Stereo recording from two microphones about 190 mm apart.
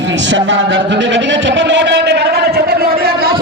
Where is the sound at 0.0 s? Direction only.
70° right (ahead or behind).